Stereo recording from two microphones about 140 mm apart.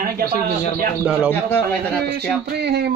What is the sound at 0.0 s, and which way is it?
Speech, 90° right.